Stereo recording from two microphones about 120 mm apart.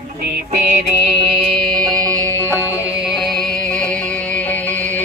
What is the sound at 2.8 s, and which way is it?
Music, 5° right (ahead or behind).